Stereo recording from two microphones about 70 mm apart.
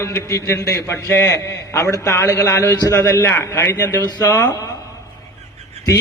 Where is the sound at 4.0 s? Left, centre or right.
Left.